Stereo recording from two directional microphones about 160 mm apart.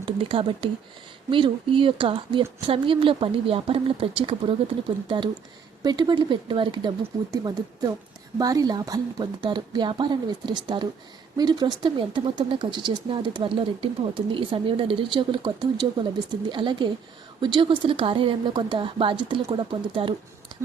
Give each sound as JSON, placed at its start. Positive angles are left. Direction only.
{"t": 0.0, "sound": "speech", "side_deg": -35}